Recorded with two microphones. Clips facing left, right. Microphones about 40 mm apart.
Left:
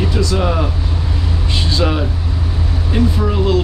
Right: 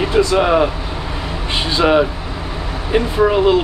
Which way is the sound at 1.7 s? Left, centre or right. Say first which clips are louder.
Right 6 dB; right.